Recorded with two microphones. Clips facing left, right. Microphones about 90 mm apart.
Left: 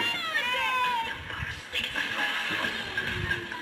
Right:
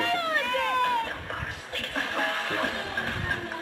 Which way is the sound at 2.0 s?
30° right (ahead or behind).